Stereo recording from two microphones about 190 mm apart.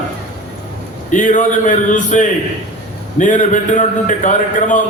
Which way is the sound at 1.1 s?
40° left (ahead or behind).